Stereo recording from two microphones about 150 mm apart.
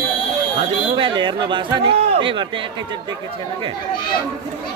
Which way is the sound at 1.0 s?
35° right (ahead or behind).